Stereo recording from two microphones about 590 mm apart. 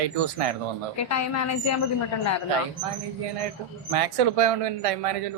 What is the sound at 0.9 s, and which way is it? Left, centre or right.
Speech, left.